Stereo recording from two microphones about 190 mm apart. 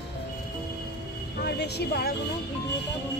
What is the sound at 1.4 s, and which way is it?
Speech, 60° left (ahead or behind).